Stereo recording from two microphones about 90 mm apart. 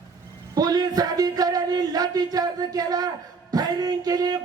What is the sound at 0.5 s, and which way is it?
Speech, 45° right (ahead or behind).